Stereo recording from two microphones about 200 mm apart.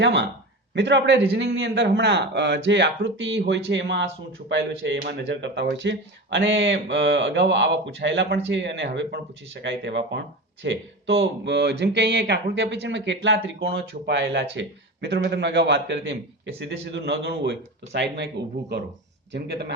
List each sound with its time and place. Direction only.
0.0 s speech: 65° right (ahead or behind)
19.3 s speech: 60° right (ahead or behind)